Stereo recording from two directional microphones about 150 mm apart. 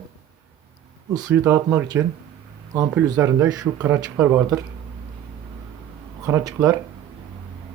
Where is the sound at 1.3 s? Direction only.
15° right (ahead or behind).